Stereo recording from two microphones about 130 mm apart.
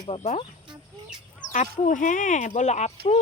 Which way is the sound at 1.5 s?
75° left (ahead or behind).